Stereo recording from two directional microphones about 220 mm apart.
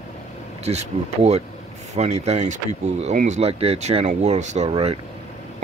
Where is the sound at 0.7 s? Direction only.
30° right (ahead or behind).